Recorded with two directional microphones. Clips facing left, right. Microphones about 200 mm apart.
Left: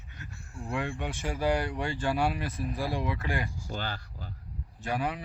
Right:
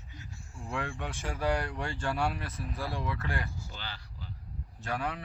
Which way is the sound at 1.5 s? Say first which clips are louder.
Left 3 dB; 15° left (ahead or behind).